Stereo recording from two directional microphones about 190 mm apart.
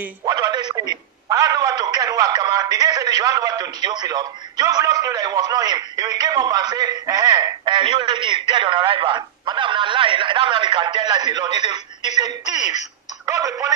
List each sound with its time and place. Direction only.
0.2 s a man's voice: 20° right (ahead or behind)
13.2 s speech: 15° right (ahead or behind)